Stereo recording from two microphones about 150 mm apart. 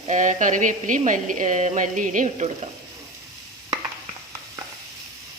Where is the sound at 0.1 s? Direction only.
55° right (ahead or behind).